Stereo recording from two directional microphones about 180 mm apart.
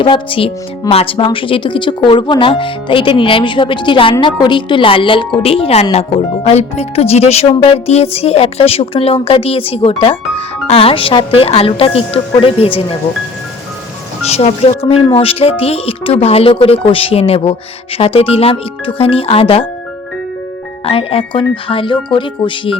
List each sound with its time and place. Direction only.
0.0 s speech: 30° left (ahead or behind)
14.3 s speech: 35° left (ahead or behind)
20.8 s speech: 30° left (ahead or behind)